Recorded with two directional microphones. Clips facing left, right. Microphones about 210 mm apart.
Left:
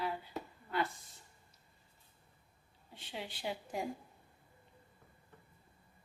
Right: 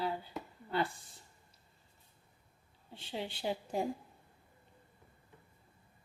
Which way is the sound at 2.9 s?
30° right (ahead or behind).